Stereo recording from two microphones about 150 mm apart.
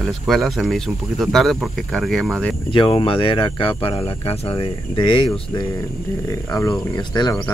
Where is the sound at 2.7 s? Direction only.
35° left (ahead or behind).